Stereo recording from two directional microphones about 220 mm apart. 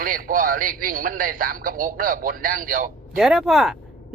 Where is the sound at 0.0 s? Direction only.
40° right (ahead or behind).